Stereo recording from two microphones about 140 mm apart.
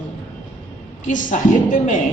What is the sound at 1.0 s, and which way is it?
Speech, 65° left (ahead or behind).